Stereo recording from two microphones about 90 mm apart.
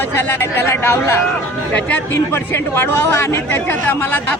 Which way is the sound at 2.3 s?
25° left (ahead or behind).